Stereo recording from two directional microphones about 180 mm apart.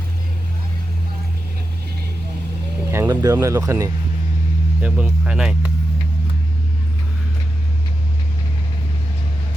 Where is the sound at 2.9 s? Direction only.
15° right (ahead or behind).